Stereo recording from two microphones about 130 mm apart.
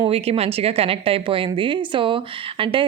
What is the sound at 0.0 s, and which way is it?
A woman's voice, 50° right (ahead or behind).